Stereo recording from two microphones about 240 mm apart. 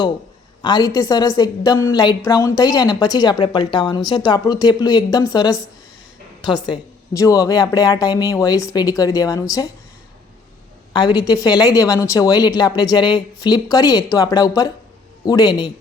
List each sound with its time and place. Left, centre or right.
0.6 s a woman's voice: centre
10.9 s a woman's voice: centre